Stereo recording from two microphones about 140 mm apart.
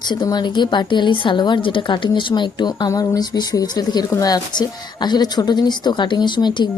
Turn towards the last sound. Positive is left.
turn(degrees=35)  # may be behind; listen again after turning